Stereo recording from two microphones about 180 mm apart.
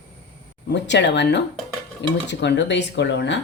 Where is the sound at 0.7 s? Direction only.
75° left (ahead or behind).